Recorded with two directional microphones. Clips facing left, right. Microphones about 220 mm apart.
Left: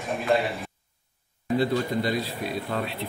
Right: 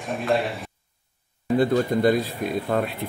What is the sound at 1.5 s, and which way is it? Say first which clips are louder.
Speech: right 4 dB; 50° right (ahead or behind).